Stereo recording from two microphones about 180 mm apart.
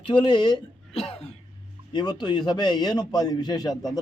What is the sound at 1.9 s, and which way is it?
A man's voice, 25° left (ahead or behind).